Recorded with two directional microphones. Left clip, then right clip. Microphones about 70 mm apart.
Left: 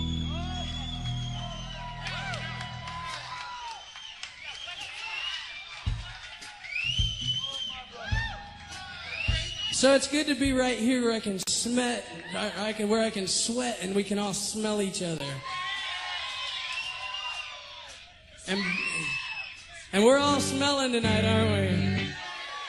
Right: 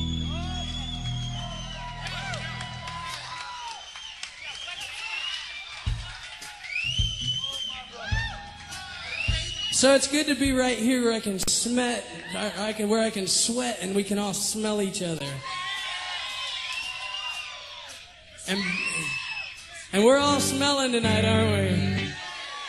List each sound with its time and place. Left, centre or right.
0.0 s music: right
4.6 s a sound: right
6.7 s music: right
9.1 s a man's voice: right
14.8 s speech: centre
15.1 s a sound: right
18.5 s whoop: right
20.1 s music: right